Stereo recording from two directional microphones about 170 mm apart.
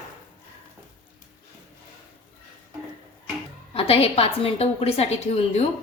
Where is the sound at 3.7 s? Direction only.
35° left (ahead or behind).